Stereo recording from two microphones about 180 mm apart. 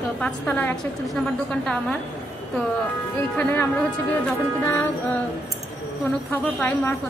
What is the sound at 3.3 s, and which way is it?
A woman's voice, 10° left (ahead or behind).